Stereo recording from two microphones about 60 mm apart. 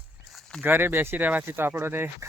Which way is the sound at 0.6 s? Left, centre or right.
Right.